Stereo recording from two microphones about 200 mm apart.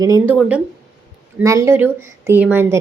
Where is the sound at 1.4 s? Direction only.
15° right (ahead or behind).